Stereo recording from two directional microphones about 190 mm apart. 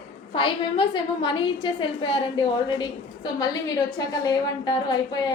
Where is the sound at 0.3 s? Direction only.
25° left (ahead or behind).